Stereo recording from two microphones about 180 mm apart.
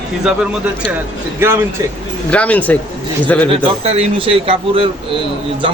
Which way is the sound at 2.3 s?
5° left (ahead or behind).